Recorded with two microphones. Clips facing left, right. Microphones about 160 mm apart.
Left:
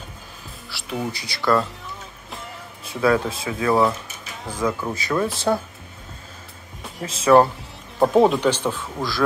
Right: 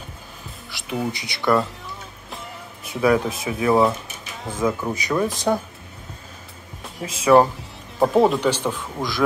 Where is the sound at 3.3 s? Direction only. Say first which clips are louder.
Right 1 dB; 20° right (ahead or behind).